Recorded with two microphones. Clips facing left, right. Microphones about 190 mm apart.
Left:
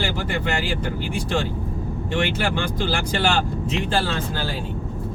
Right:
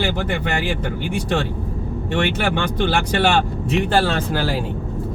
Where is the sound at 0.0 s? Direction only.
60° right (ahead or behind).